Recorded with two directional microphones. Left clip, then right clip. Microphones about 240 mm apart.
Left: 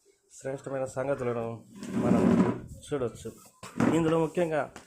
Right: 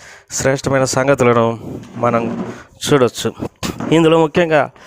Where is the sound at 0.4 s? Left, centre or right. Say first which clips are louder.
Right 18 dB; right.